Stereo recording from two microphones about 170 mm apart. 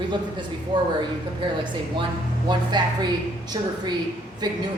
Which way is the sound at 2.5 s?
25° right (ahead or behind).